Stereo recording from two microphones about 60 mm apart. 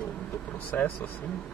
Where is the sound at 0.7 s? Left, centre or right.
Left.